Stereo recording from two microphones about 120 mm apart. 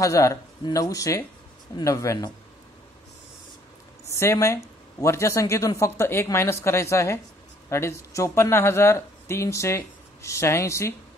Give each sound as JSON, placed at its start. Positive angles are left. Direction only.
{"t": 0.0, "sound": "speech", "side_deg": 25}
{"t": 4.1, "sound": "speech", "side_deg": 25}